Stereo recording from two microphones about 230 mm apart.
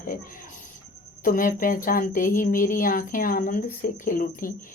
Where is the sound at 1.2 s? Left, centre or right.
Left.